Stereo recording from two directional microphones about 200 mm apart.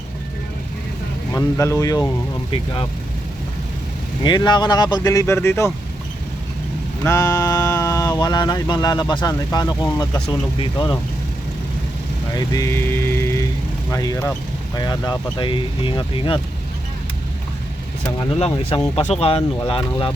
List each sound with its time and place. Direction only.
1.3 s speech: 15° left (ahead or behind)
4.2 s speech: 20° left (ahead or behind)
7.0 s a sound: 15° left (ahead or behind)
10.2 s speech: 25° left (ahead or behind)
12.3 s speech: 15° left (ahead or behind)
18.0 s speech: 25° left (ahead or behind)